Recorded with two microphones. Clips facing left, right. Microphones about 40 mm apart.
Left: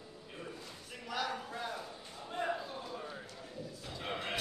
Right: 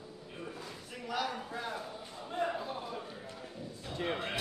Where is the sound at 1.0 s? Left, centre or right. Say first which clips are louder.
Right 2 dB; centre.